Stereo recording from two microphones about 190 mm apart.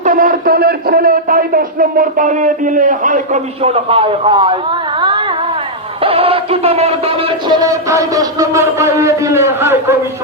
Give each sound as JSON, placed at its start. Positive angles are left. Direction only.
{"t": 0.0, "sound": "a man's voice", "side_deg": -45}